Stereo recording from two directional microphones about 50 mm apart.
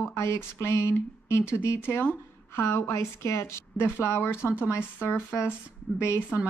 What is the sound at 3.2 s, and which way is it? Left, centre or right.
Speech, left.